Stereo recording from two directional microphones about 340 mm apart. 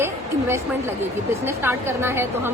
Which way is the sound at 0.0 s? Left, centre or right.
Centre.